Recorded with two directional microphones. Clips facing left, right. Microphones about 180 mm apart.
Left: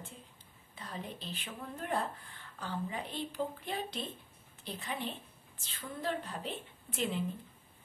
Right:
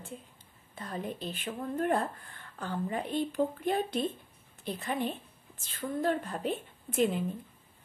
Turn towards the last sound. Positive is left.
turn(degrees=-45)  # may be behind; listen again after turning